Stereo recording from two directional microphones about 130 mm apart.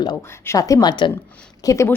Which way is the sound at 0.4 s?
25° left (ahead or behind).